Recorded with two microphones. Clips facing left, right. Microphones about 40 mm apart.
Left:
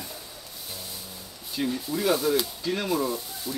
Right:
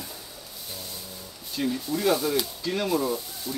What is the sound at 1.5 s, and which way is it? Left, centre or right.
Speech, centre.